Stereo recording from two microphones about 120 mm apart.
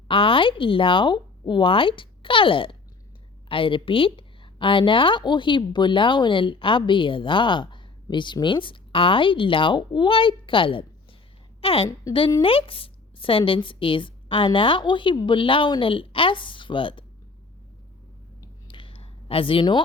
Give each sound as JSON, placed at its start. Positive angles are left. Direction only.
{"t": 0.1, "sound": "a woman's voice", "side_deg": 45}
{"t": 18.7, "sound": "clicking", "side_deg": 45}